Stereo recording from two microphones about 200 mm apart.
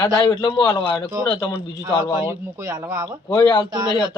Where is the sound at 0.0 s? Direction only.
20° left (ahead or behind).